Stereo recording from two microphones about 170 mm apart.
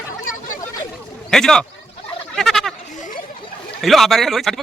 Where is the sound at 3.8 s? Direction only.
Centre (ahead or behind).